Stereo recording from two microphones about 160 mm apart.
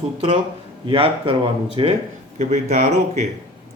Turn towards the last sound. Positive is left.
turn(degrees=-45)  # may be behind; listen again after turning